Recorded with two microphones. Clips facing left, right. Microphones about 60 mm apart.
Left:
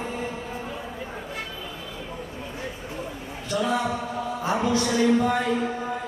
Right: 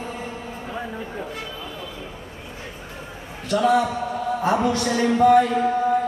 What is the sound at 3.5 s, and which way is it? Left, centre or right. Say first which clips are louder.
Music: right 6 dB; right.